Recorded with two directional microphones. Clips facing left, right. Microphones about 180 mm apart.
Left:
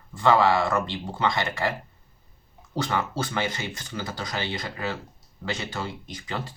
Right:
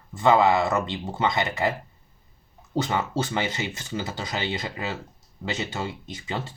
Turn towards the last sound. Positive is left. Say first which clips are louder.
# right 1 dB
turn(degrees=-25)  # may be behind; listen again after turning